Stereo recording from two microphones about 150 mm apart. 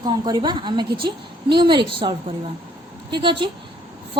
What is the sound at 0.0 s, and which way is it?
Speech, 30° right (ahead or behind).